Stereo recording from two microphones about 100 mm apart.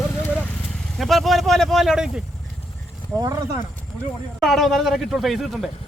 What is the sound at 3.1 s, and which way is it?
Speech, 35° right (ahead or behind).